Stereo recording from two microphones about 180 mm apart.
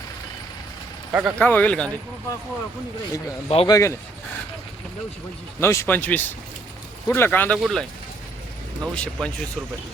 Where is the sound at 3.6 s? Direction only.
20° left (ahead or behind).